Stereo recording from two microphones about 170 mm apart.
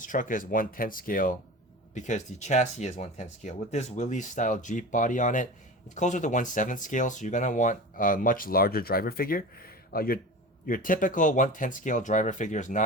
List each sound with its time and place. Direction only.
0.0 s speech: 50° left (ahead or behind)